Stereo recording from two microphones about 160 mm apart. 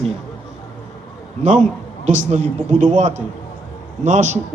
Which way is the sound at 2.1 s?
45° right (ahead or behind).